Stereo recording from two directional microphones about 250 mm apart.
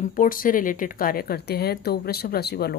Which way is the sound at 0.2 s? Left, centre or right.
Left.